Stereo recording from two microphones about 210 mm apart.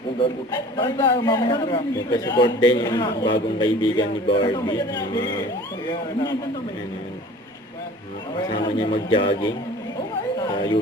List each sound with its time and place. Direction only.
0.2 s a man's voice: 20° left (ahead or behind)
8.8 s a man's voice: 25° left (ahead or behind)